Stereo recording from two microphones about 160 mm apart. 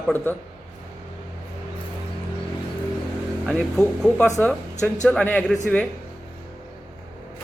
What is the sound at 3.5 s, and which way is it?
Speech, 5° left (ahead or behind).